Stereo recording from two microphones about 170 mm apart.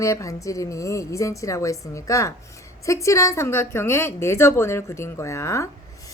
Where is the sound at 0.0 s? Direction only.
20° left (ahead or behind).